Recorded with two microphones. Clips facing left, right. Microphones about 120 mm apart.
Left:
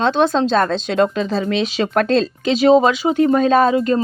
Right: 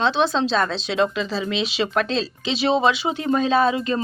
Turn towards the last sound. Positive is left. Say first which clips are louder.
# left 5 dB
turn(degrees=45)  # may be behind; listen again after turning